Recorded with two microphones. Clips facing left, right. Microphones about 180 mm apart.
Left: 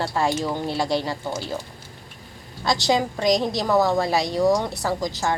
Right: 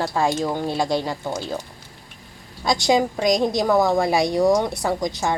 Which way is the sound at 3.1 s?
10° right (ahead or behind).